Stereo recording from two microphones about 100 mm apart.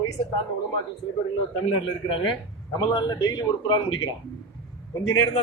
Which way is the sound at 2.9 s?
45° left (ahead or behind).